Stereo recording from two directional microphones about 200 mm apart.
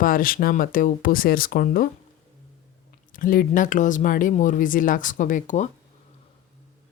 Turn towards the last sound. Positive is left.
turn(degrees=40)  # may be behind; listen again after turning